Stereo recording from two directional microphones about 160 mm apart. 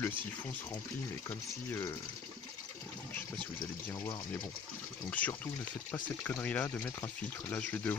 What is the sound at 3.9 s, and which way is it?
Speech, 25° left (ahead or behind).